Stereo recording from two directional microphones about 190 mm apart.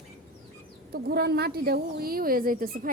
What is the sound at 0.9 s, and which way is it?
A woman's voice, 55° right (ahead or behind).